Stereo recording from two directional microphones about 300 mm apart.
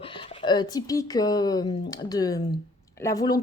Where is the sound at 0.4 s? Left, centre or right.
Centre.